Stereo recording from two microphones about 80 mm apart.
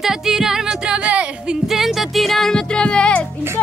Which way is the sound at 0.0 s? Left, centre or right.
Centre.